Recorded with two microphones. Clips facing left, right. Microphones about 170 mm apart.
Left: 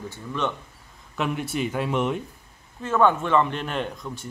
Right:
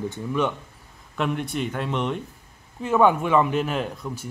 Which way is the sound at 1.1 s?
Centre (ahead or behind).